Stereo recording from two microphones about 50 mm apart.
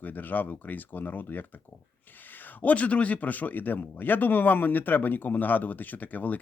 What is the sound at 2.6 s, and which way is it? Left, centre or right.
Speech, left.